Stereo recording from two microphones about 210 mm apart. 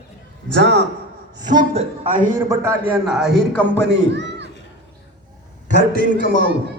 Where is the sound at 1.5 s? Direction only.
30° right (ahead or behind).